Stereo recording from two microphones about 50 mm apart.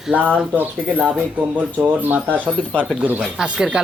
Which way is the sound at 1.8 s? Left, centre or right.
Right.